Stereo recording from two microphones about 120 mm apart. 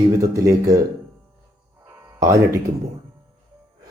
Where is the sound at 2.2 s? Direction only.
25° right (ahead or behind).